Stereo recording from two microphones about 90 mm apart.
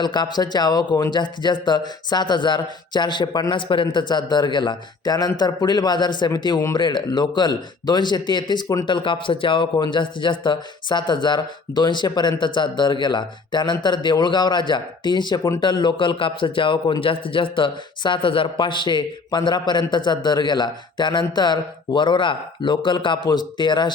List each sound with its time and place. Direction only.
0.0 s speech: 55° left (ahead or behind)
3.8 s speech: 50° left (ahead or behind)
8.9 s speech: 70° left (ahead or behind)
9.8 s speech: 60° left (ahead or behind)